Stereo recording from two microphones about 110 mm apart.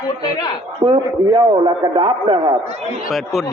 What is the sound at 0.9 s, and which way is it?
A man's voice, 45° right (ahead or behind).